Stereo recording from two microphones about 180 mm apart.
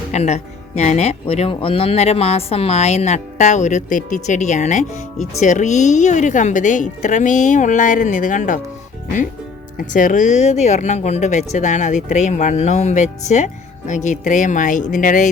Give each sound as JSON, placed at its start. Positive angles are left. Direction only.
{"t": 0.1, "sound": "speech", "side_deg": 40}
{"t": 9.7, "sound": "speech", "side_deg": 50}